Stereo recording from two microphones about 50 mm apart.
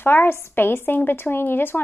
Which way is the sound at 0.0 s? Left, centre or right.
Left.